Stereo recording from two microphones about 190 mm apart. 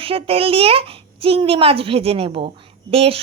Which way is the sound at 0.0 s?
30° right (ahead or behind).